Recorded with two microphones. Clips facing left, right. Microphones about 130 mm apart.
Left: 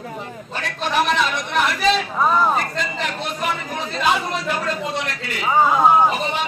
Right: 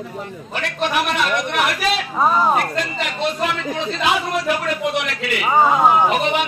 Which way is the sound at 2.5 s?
70° right (ahead or behind).